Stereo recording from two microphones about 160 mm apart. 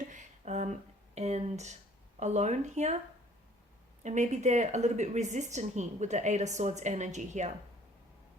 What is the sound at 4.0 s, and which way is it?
Speech, 50° right (ahead or behind).